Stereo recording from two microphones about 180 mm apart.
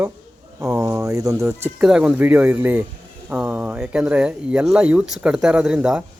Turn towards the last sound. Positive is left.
turn(degrees=-5)  # may be behind; listen again after turning